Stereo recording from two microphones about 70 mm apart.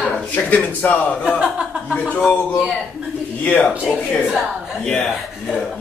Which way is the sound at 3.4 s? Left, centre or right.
Left.